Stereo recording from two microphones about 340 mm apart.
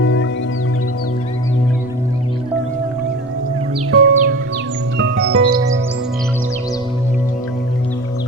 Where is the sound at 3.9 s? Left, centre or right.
Right.